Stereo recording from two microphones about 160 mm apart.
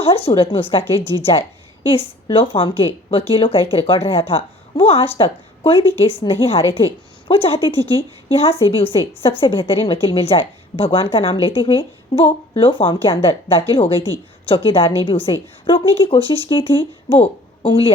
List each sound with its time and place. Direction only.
0.0 s speech: 35° left (ahead or behind)
2.2 s speech: 35° left (ahead or behind)